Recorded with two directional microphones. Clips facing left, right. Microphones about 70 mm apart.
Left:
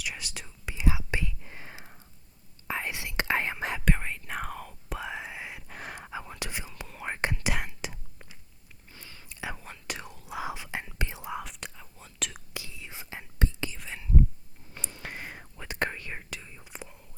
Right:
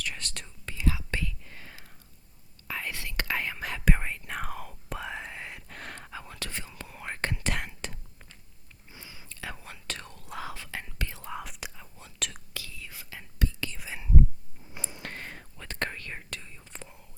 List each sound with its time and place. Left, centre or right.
0.0 s whispering: centre; by 3.8 s left
3.8 s whispering: centre
7.4 s whispering: centre
8.9 s whispering: centre
9.2 s whispering: centre
10.4 s whispering: centre
11.3 s whispering: centre
12.5 s whispering: left
13.7 s whispering: centre
15.0 s whispering: centre